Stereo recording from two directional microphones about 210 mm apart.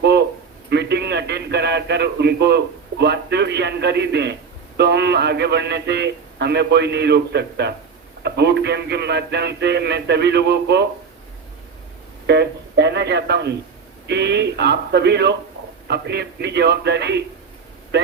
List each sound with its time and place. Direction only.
0.0 s a sound: 50° right (ahead or behind)
0.7 s a man's voice: 55° right (ahead or behind)
12.2 s a man's voice: 55° right (ahead or behind)